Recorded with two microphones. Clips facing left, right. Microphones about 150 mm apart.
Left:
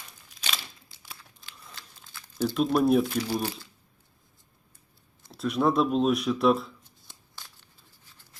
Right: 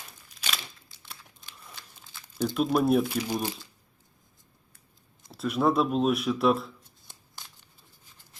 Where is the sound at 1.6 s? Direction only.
5° right (ahead or behind).